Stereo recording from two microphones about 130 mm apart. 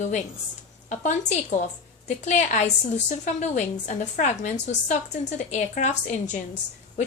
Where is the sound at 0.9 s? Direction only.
70° left (ahead or behind).